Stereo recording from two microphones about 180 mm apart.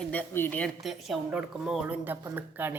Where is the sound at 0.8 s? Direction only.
Centre (ahead or behind).